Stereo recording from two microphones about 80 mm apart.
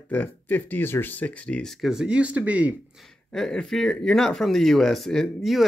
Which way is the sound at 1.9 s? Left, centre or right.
Centre.